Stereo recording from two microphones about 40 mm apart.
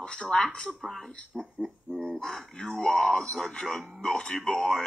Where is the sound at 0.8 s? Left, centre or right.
Centre.